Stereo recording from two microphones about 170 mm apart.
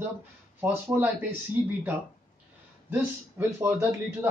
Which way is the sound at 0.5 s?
10° right (ahead or behind).